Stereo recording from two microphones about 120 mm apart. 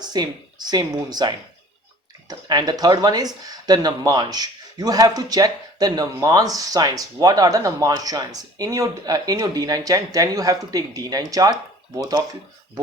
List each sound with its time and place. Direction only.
0.0 s speech: 35° right (ahead or behind)